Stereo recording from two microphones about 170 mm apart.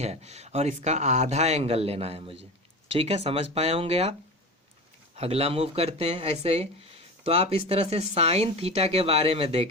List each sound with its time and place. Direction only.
0.0 s speech: 40° right (ahead or behind)
5.1 s speech: 35° right (ahead or behind)